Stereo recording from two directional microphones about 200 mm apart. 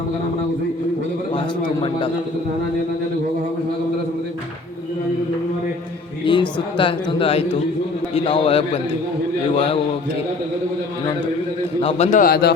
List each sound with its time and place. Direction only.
1.3 s a man's voice: 25° left (ahead or behind)
6.2 s a man's voice: 25° left (ahead or behind)
11.8 s a man's voice: 30° left (ahead or behind); by 12.5 s 50° left (ahead or behind)